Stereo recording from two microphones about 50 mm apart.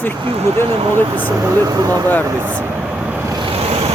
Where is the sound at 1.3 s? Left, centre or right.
Right.